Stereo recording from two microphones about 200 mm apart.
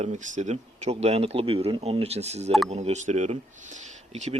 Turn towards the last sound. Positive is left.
turn(degrees=-35)  # may be behind; listen again after turning